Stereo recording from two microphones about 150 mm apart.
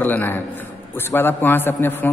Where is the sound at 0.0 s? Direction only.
15° left (ahead or behind).